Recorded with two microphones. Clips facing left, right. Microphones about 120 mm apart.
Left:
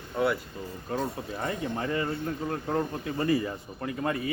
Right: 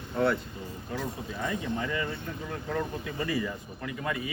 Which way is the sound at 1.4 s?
40° left (ahead or behind).